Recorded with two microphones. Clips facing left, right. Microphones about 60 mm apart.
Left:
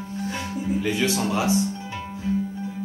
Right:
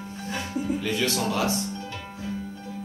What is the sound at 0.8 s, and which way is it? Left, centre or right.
Speech, centre.